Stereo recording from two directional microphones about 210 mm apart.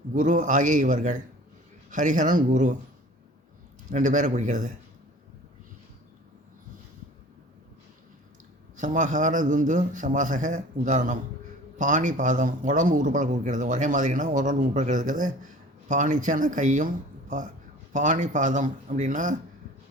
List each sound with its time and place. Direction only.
0.1 s speech: 35° right (ahead or behind)
3.8 s speech: 35° right (ahead or behind)
8.7 s speech: 35° right (ahead or behind)